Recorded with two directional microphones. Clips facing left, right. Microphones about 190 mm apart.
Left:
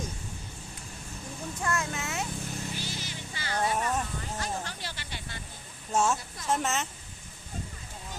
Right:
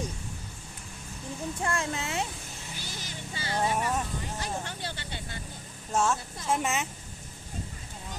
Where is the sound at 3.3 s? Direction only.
25° right (ahead or behind).